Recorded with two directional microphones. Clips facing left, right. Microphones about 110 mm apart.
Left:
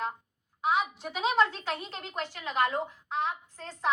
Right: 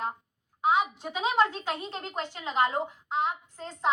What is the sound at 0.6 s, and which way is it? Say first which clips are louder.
A woman's voice: right 3 dB; 20° right (ahead or behind).